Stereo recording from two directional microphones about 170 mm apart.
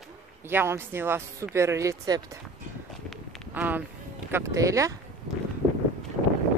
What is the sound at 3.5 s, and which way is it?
Speech, 10° right (ahead or behind).